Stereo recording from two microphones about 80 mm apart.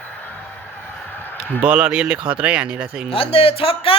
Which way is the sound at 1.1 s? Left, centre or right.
Left.